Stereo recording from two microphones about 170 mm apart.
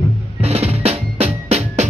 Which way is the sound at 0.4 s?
35° right (ahead or behind).